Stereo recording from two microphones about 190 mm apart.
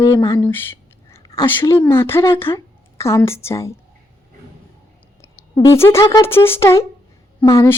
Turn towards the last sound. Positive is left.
turn(degrees=15)  # may be behind; listen again after turning